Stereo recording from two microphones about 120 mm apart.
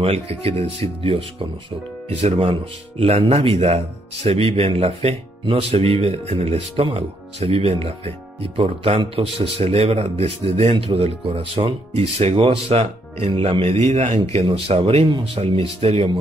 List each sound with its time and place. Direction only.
0.0 s speech: 55° right (ahead or behind)
14.3 s speech: 55° right (ahead or behind)